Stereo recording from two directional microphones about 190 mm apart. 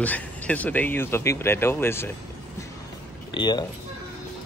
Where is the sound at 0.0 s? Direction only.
10° left (ahead or behind).